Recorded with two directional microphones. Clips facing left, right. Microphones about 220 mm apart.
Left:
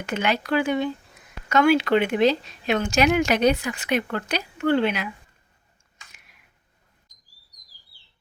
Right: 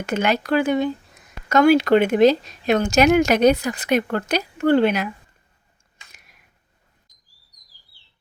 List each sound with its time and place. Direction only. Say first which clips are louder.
0.0 s speech: right 4 dB; 45° right (ahead or behind)